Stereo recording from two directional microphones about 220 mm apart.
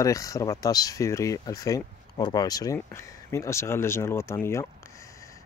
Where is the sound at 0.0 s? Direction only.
15° left (ahead or behind).